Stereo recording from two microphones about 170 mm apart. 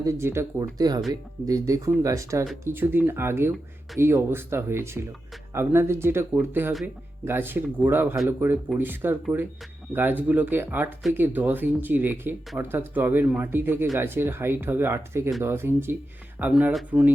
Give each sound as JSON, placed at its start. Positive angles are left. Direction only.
{"t": 0.0, "sound": "speech", "side_deg": -15}